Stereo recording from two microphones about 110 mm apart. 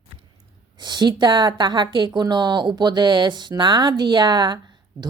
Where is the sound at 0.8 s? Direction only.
40° right (ahead or behind).